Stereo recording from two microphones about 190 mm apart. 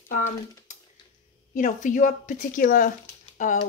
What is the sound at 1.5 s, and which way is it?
Speech, 40° left (ahead or behind).